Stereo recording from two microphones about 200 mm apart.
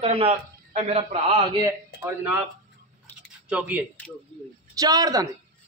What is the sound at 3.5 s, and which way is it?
Speech, 10° right (ahead or behind).